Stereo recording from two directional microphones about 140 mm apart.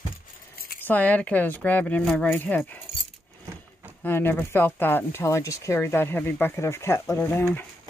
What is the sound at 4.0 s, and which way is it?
Speech, 15° left (ahead or behind).